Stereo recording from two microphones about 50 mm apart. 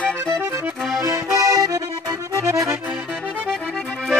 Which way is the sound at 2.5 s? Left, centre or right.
Right.